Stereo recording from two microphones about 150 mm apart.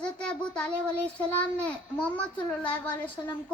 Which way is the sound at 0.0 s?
5° left (ahead or behind).